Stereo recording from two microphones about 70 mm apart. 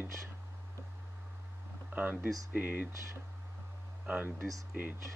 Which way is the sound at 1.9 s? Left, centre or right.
Right.